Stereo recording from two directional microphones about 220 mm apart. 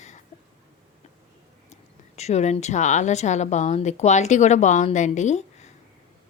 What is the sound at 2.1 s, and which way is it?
A woman's voice, 30° left (ahead or behind).